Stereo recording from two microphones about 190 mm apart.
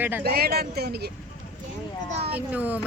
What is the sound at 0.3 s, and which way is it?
Speech, 55° right (ahead or behind).